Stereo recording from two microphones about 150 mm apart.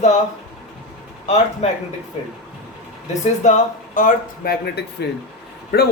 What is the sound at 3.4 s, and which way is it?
Speech, 60° left (ahead or behind).